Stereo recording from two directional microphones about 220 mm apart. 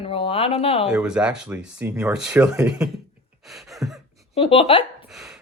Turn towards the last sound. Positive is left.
turn(degrees=0)  # may be behind; listen again after turning